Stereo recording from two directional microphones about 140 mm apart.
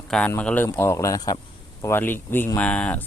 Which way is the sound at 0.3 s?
10° left (ahead or behind).